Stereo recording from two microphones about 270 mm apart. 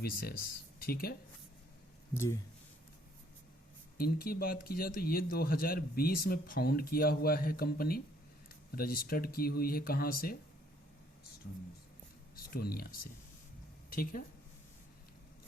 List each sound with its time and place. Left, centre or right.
0.0 s speech: left
2.1 s speech: centre
3.9 s speech: left
12.5 s speech: left
13.9 s speech: left